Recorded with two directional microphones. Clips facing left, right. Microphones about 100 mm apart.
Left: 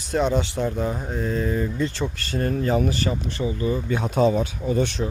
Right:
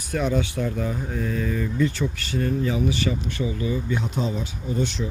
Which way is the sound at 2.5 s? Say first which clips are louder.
Left 3 dB; 50° left (ahead or behind).